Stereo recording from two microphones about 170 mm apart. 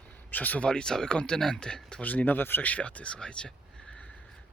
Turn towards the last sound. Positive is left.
turn(degrees=5)  # may be behind; listen again after turning